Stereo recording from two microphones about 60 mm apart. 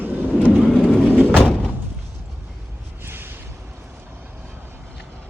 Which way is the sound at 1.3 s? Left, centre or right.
Centre.